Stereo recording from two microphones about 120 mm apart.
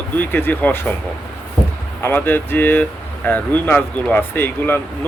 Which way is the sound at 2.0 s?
15° left (ahead or behind).